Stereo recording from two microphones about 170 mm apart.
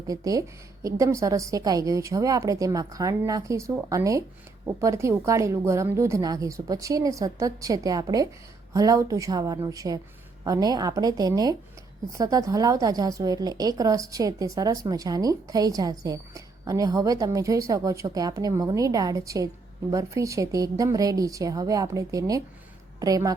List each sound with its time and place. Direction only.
0.1 s a woman's voice: 20° right (ahead or behind)